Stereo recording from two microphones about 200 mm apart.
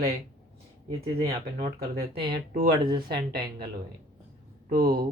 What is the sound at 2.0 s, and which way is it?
Speech, 25° right (ahead or behind).